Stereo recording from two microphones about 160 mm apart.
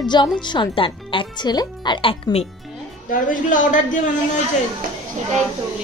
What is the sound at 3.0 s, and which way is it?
Speech, 55° left (ahead or behind).